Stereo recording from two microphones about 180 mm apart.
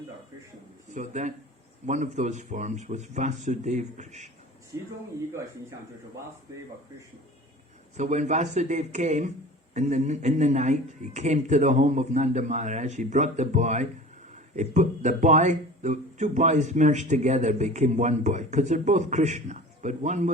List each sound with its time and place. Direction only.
0.9 s speech: 40° right (ahead or behind)
7.9 s speech: 40° right (ahead or behind)